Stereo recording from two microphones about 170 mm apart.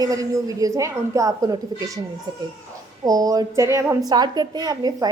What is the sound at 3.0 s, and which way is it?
A woman's voice, 20° right (ahead or behind).